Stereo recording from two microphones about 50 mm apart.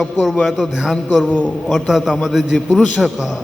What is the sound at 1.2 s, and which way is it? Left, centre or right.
Speech, left.